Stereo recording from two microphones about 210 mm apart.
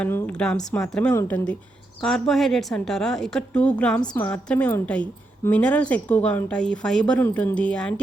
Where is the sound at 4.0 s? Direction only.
20° left (ahead or behind).